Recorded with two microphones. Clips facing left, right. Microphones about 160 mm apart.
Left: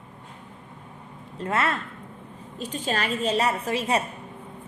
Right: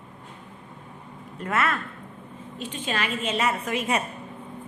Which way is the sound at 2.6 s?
40° left (ahead or behind).